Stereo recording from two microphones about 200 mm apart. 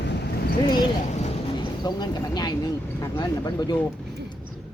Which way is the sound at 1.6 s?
20° left (ahead or behind).